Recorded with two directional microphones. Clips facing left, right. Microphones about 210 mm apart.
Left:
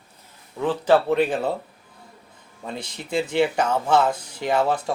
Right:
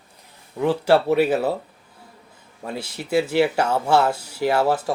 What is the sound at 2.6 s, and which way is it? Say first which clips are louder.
Speech: right 3 dB; 5° right (ahead or behind).